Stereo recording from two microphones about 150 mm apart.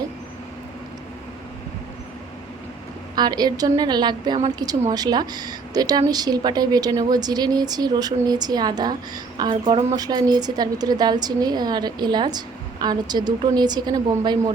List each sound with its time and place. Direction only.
3.2 s a woman's voice: 25° right (ahead or behind)